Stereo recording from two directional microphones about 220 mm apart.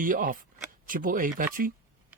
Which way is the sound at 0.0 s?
40° right (ahead or behind).